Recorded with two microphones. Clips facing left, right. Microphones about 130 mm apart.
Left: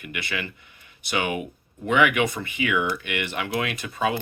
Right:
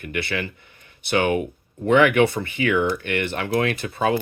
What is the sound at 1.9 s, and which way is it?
Speech, 35° right (ahead or behind).